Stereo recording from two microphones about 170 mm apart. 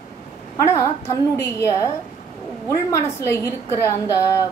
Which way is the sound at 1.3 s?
15° left (ahead or behind).